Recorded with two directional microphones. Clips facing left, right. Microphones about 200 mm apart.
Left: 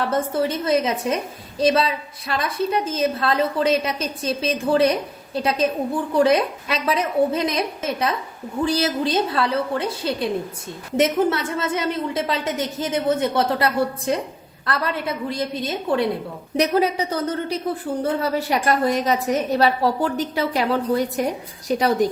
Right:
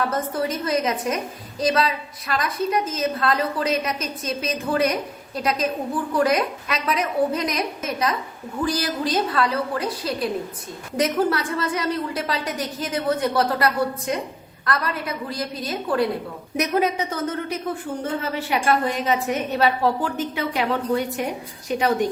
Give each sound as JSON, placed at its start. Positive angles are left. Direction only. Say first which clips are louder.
{"t": 0.1, "sound": "a woman's voice", "louder": "left 3 dB", "side_deg": 30}